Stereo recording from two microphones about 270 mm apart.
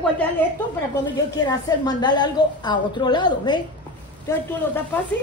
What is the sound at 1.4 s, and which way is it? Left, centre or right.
A woman's voice, centre.